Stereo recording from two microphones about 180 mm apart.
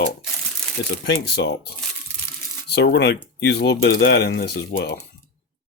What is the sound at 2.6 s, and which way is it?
Speech, 75° left (ahead or behind).